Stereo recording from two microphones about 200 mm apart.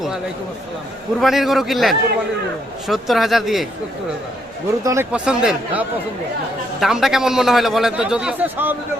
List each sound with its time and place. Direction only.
1.2 s a man's voice: centre (ahead or behind)
4.8 s speech: 15° right (ahead or behind)
5.1 s a man's voice: 5° right (ahead or behind)